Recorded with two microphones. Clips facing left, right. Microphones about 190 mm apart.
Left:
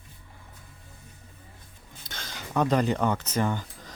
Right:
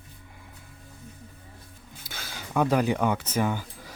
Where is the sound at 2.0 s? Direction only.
5° right (ahead or behind).